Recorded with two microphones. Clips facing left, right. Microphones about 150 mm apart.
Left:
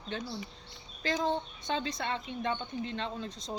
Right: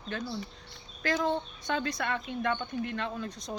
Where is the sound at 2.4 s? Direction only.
60° right (ahead or behind).